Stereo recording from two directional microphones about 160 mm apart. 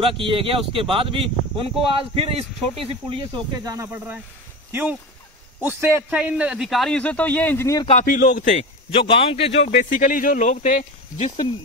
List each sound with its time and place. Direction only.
0.0 s speech: 35° right (ahead or behind); by 4.2 s 10° right (ahead or behind)
5.6 s a man's voice: 15° right (ahead or behind); by 7.8 s 15° left (ahead or behind)
8.0 s speech: 60° left (ahead or behind)
8.9 s a man's voice: 35° left (ahead or behind)